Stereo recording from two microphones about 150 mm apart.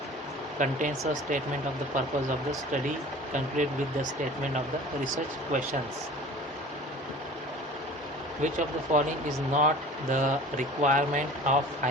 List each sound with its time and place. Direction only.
0.6 s speech: 60° right (ahead or behind)
3.3 s speech: 55° right (ahead or behind)
8.4 s speech: 55° right (ahead or behind)